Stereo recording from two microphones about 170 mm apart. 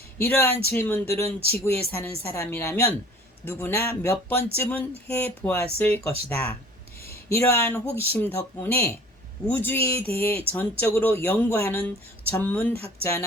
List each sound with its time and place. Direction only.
0.2 s speech: 10° left (ahead or behind)